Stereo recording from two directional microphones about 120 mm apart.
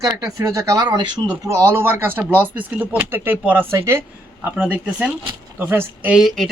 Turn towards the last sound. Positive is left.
turn(degrees=0)  # may be behind; listen again after turning